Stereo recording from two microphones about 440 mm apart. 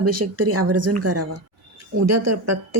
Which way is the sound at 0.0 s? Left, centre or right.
Right.